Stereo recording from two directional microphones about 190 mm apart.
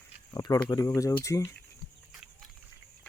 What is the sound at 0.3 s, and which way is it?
Speech, 20° left (ahead or behind).